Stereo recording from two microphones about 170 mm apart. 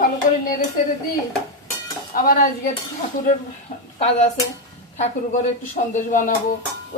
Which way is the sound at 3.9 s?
40° left (ahead or behind).